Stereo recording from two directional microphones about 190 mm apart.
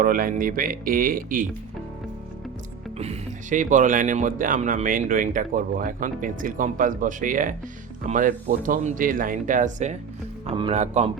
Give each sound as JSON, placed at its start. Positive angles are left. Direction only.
{"t": 0.0, "sound": "speech", "side_deg": -45}
{"t": 3.0, "sound": "speech", "side_deg": -40}
{"t": 10.4, "sound": "speech", "side_deg": -30}